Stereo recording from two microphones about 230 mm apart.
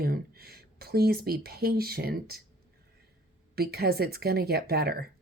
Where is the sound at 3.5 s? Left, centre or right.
Right.